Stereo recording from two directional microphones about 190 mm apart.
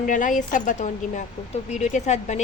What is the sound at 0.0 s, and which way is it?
A woman's voice, 45° left (ahead or behind).